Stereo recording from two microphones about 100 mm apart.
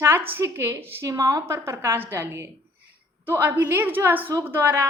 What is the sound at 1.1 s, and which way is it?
A woman's voice, 35° right (ahead or behind).